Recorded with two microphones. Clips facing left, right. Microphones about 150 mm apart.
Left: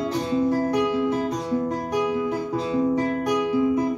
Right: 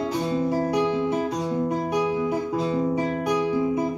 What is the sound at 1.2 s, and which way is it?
Music, 15° right (ahead or behind).